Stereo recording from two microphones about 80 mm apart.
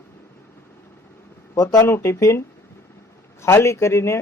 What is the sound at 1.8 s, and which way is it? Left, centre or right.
Speech, left.